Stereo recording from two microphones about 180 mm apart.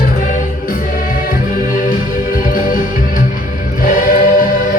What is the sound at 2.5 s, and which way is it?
Music, 50° left (ahead or behind).